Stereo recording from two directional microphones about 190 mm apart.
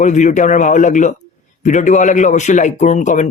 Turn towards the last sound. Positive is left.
turn(degrees=40)  # may be behind; listen again after turning